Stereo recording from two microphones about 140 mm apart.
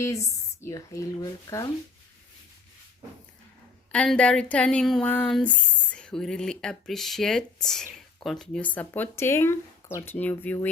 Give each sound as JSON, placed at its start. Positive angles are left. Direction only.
{"t": 0.0, "sound": "speech", "side_deg": 20}
{"t": 3.9, "sound": "speech", "side_deg": 10}